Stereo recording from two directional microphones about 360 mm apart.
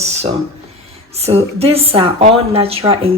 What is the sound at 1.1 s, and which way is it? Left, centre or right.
Speech, centre.